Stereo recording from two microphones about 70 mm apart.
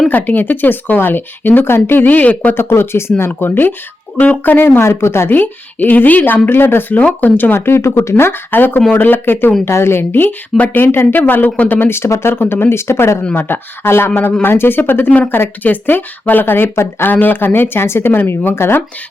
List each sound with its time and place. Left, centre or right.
0.1 s speech: left
2.6 s a woman's voice: left
5.3 s a woman's voice: left